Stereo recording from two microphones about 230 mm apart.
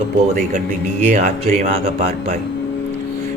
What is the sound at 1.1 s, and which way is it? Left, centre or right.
Speech, right.